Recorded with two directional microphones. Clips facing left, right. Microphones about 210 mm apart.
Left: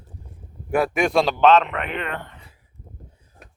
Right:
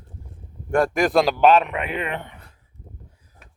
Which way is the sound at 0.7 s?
5° left (ahead or behind).